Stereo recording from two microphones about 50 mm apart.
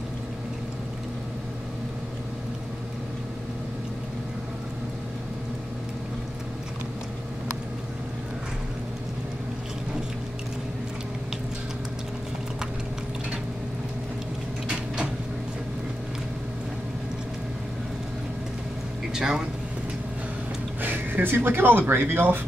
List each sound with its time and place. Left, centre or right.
19.1 s speech: centre
20.8 s speech: right